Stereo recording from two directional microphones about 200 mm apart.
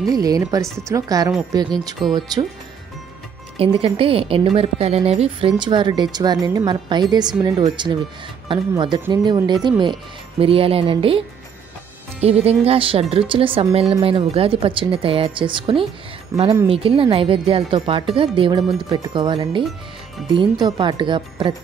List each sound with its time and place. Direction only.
0.1 s a woman's voice: 20° right (ahead or behind)
3.5 s a woman's voice: 25° right (ahead or behind)